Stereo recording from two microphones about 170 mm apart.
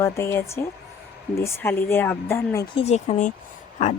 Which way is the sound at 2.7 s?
40° left (ahead or behind).